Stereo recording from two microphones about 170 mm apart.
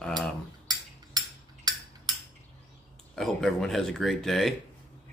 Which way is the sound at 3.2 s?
Centre (ahead or behind).